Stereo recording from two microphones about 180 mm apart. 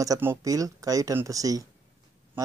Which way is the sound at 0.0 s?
15° right (ahead or behind).